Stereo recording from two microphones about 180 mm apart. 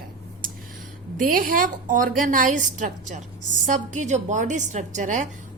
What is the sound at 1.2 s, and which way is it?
A woman's voice, 50° right (ahead or behind).